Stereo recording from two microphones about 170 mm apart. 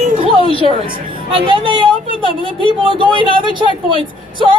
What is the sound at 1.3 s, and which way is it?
Speech, 30° right (ahead or behind).